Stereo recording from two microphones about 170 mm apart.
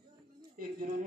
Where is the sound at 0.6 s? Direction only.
55° right (ahead or behind).